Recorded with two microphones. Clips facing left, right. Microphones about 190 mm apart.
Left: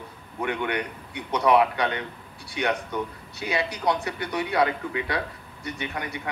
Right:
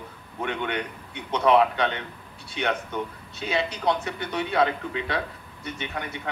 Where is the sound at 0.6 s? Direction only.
20° right (ahead or behind).